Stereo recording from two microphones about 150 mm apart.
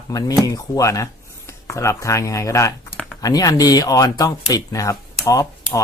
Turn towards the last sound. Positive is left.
turn(degrees=20)  # may be behind; listen again after turning